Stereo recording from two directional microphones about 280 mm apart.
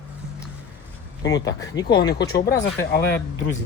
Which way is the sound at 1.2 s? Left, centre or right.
Centre.